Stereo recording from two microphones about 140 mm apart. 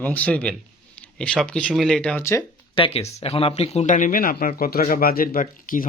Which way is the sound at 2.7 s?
45° left (ahead or behind).